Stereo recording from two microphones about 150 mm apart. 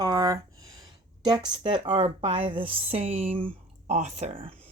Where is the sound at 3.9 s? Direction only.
50° right (ahead or behind).